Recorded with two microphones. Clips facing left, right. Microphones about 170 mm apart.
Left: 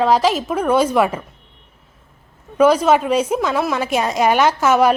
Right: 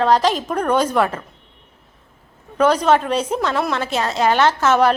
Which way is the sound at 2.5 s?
10° left (ahead or behind).